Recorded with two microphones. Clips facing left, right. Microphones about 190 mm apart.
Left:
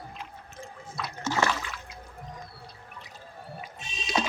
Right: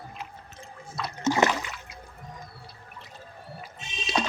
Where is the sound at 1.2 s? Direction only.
20° right (ahead or behind).